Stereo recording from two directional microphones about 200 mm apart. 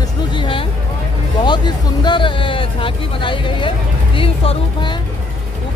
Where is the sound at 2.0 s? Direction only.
25° left (ahead or behind).